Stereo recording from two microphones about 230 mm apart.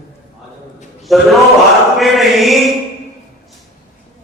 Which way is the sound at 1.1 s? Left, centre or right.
Centre.